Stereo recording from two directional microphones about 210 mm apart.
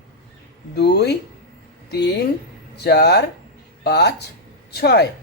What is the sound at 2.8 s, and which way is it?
Speech, 50° left (ahead or behind).